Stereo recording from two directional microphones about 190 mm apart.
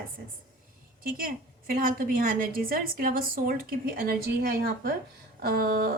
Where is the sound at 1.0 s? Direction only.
50° right (ahead or behind).